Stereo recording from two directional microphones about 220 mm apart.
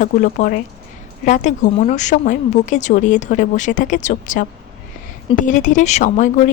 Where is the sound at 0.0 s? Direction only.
35° left (ahead or behind).